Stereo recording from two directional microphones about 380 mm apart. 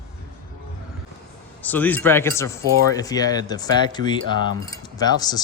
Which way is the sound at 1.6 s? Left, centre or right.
Centre.